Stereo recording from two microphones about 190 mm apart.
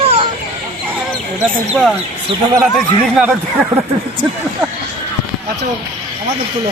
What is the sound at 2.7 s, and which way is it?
Speech, 5° right (ahead or behind).